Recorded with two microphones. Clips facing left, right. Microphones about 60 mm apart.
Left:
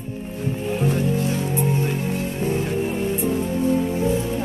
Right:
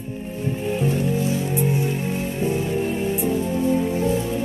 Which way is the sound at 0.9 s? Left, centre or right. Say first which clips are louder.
Even; left.